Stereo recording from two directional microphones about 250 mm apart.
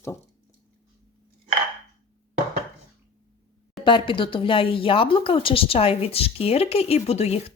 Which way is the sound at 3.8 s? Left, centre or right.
Centre.